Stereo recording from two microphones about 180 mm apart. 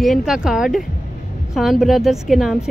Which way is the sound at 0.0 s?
Centre (ahead or behind).